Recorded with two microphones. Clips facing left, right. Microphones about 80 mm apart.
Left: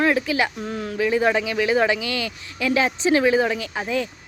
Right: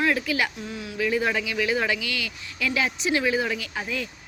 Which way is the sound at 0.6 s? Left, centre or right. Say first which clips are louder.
Left 6 dB; left.